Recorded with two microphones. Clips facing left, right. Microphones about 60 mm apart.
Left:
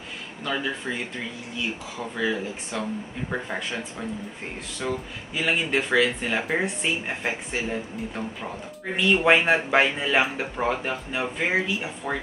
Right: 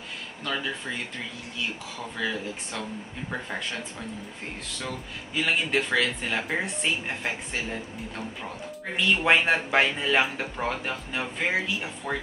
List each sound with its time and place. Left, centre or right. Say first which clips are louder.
0.5 s speech: left 3 dB; centre
8.9 s speech: left 3 dB; centre